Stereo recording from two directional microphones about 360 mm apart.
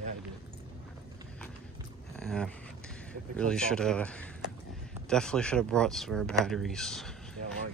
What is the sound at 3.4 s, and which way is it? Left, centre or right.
Speech, centre.